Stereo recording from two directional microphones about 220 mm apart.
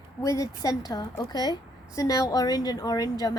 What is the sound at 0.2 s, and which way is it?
A woman's voice, 15° left (ahead or behind).